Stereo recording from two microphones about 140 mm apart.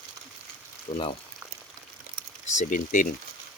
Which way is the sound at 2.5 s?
65° left (ahead or behind).